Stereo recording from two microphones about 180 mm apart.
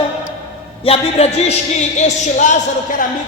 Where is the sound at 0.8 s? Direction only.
35° left (ahead or behind).